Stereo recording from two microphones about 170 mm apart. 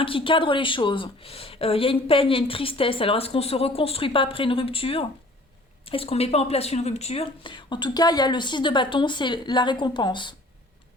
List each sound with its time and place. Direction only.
0.0 s speech: 30° left (ahead or behind)